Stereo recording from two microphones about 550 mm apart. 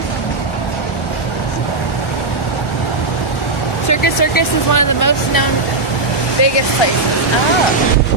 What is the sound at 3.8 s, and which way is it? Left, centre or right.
Speech, left.